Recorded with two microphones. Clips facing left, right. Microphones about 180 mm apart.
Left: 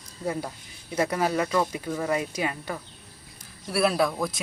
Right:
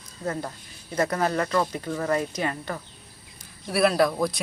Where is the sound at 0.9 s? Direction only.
10° left (ahead or behind).